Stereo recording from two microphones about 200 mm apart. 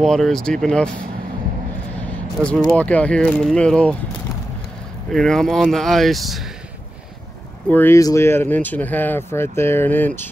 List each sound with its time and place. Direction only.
0.0 s speech: centre (ahead or behind)
2.4 s speech: 5° left (ahead or behind)
5.1 s speech: centre (ahead or behind)
7.7 s speech: 10° left (ahead or behind)